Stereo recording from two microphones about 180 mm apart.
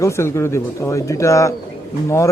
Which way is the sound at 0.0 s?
15° left (ahead or behind).